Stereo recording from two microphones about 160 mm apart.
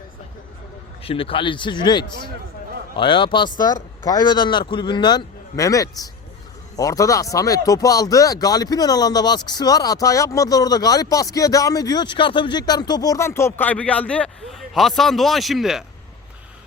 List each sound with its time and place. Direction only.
1.0 s speech: 35° left (ahead or behind); by 15.8 s centre (ahead or behind)